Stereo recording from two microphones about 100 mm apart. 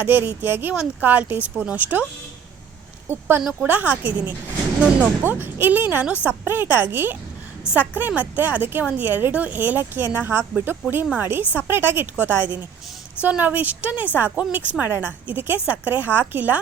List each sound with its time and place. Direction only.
0.0 s speech: 20° right (ahead or behind)
3.1 s a woman's voice: 25° right (ahead or behind)